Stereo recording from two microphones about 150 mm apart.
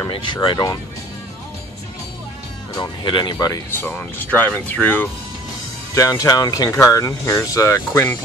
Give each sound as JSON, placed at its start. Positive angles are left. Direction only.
{"t": 0.0, "sound": "speech", "side_deg": 35}
{"t": 2.7, "sound": "speech", "side_deg": 30}
{"t": 5.9, "sound": "speech", "side_deg": 20}